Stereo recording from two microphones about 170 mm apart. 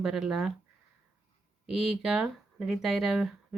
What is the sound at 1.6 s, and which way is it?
Speech, centre (ahead or behind).